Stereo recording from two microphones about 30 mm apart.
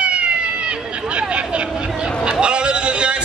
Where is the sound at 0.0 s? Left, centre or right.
Right.